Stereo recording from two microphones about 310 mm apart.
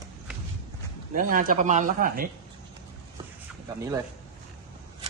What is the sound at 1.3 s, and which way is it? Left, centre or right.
Speech, right.